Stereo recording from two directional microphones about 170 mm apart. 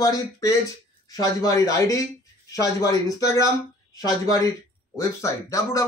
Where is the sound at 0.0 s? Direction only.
20° left (ahead or behind).